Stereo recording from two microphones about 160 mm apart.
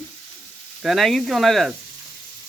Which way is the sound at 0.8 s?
Centre (ahead or behind).